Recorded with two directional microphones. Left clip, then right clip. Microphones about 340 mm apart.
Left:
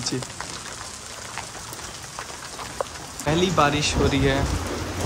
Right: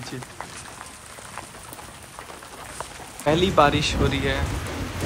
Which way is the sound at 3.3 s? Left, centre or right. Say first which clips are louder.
Right 2 dB; centre.